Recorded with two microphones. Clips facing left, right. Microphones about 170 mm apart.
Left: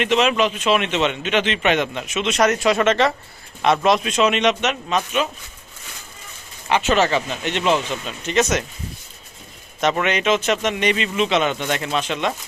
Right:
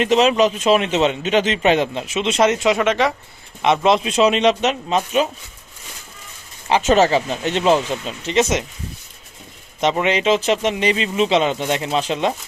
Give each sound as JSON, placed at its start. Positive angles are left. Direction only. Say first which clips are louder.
{"t": 0.0, "sound": "a man's voice", "louder": "right 3 dB", "side_deg": -35}
{"t": 2.8, "sound": "speech", "louder": "even", "side_deg": -10}
{"t": 3.6, "sound": "a man's voice", "louder": "right 1 dB", "side_deg": -25}
{"t": 6.7, "sound": "a man's voice", "louder": "right 3 dB", "side_deg": -35}
{"t": 9.8, "sound": "speech", "louder": "right 2 dB", "side_deg": -25}